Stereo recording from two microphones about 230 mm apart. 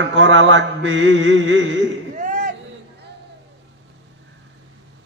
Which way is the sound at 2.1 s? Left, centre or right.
Right.